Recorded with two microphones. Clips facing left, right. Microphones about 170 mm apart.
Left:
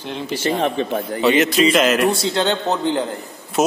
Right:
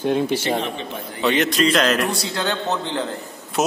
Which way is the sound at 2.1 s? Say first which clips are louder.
Left 5 dB; 25° left (ahead or behind).